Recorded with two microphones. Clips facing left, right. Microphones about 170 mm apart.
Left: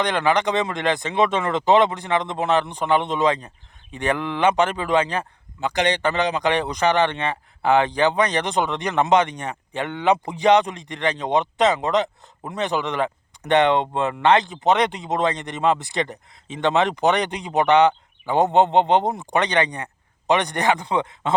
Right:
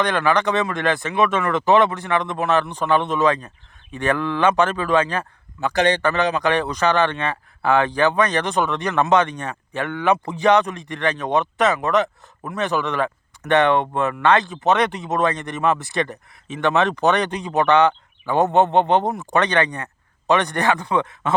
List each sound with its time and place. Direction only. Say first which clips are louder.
0.0 s a man's voice: right 1 dB; 15° left (ahead or behind)